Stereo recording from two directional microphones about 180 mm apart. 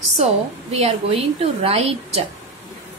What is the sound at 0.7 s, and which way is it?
A woman's voice, 35° right (ahead or behind).